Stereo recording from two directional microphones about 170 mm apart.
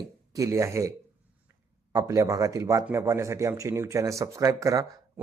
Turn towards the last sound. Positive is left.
turn(degrees=-20)  # may be behind; listen again after turning